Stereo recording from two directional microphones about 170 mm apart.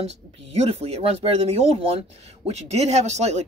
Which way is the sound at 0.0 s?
35° right (ahead or behind).